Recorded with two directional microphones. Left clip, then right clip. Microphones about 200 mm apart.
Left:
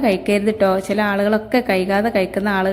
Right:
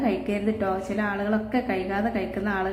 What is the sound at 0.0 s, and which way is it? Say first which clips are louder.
A woman's voice: left 9 dB; 40° left (ahead or behind).